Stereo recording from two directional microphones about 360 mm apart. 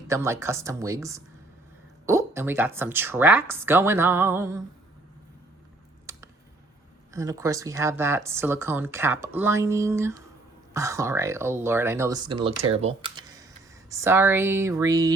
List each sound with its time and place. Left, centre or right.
0.1 s speech: centre
7.1 s speech: centre